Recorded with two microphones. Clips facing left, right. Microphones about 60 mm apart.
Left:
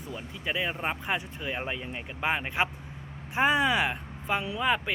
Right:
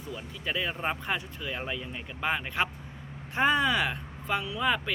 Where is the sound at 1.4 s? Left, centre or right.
Left.